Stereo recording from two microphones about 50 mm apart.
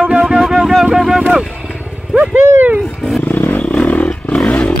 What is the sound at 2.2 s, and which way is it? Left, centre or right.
Speech, right.